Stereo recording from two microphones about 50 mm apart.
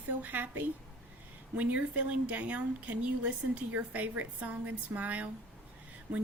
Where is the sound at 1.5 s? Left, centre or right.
Right.